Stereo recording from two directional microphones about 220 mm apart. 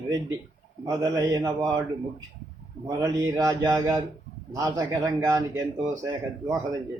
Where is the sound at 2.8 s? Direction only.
15° right (ahead or behind).